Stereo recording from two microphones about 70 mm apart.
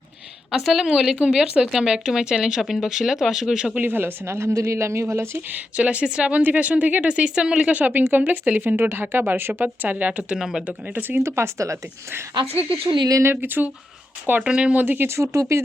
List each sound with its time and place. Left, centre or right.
0.5 s speech: centre
3.8 s speech: right
5.5 s speech: right
10.7 s speech: right
11.2 s speech: right
13.3 s speech: right
14.4 s speech: centre; by 15.6 s right